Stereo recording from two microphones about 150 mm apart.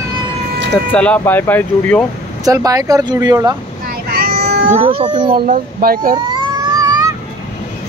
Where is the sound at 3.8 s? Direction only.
80° right.